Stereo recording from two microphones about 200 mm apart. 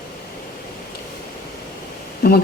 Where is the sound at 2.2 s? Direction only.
50° left (ahead or behind).